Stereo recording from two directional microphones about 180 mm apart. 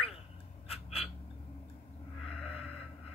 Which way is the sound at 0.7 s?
35° left (ahead or behind).